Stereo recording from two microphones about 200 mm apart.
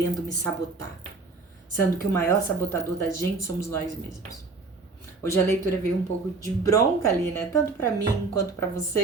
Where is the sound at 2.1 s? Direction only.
10° left (ahead or behind).